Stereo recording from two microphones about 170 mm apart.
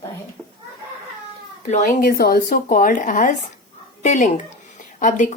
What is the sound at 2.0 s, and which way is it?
Speech, 65° left (ahead or behind).